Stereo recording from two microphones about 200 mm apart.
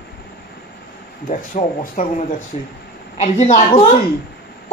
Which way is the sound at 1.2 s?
40° left (ahead or behind).